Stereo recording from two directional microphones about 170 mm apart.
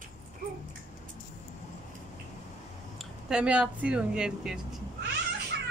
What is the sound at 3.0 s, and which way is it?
Speech, 5° right (ahead or behind).